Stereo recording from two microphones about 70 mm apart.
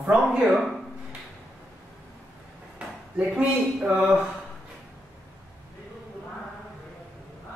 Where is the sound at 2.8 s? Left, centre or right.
Centre.